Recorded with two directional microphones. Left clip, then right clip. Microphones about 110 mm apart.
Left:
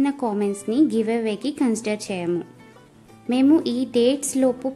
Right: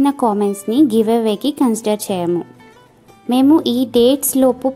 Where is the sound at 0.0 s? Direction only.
45° right (ahead or behind).